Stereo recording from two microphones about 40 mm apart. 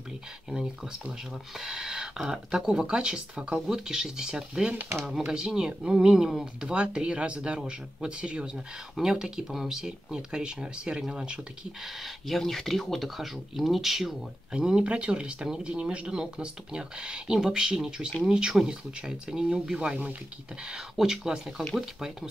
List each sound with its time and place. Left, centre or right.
1.6 s speech: centre
9.0 s speech: centre
12.3 s speech: centre
14.8 s speech: right
15.4 s speech: centre
15.7 s speech: right; by 22.3 s centre